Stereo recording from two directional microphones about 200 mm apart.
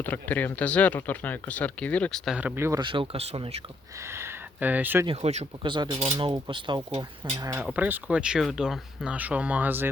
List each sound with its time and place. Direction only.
0.0 s speech: 10° left (ahead or behind); by 2.8 s 15° right (ahead or behind)
2.8 s dishes: 25° right (ahead or behind)
4.0 s speech: 10° right (ahead or behind)
5.0 s speech: 30° right (ahead or behind)
6.1 s dishes: 25° right (ahead or behind)
7.3 s speech: 15° right (ahead or behind)